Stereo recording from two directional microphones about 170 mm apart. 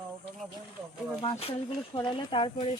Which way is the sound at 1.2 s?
35° left (ahead or behind).